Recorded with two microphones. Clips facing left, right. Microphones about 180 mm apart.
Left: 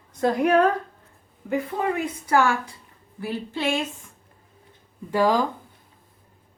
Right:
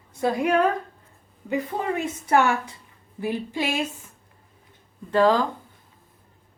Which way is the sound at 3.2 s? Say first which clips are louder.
Right 2 dB; 15° right (ahead or behind).